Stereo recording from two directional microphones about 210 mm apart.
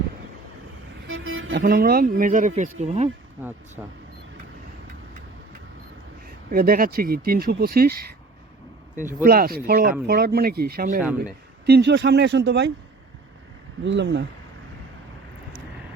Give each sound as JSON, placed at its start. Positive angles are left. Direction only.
{"t": 1.0, "sound": "vehicle", "side_deg": -70}
{"t": 1.5, "sound": "speech", "side_deg": -40}
{"t": 3.8, "sound": "speech", "side_deg": -10}
{"t": 6.5, "sound": "speech", "side_deg": -45}
{"t": 9.2, "sound": "speech", "side_deg": -45}
{"t": 13.8, "sound": "speech", "side_deg": -60}